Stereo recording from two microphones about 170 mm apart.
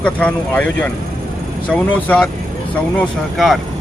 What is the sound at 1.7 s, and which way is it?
Speech, 10° left (ahead or behind).